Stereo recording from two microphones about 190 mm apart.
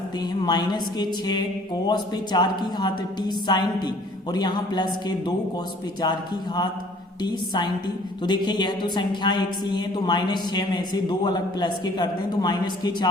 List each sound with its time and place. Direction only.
0.2 s a woman's voice: 20° left (ahead or behind)